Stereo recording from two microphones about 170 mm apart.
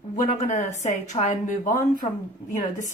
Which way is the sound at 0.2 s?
45° left (ahead or behind).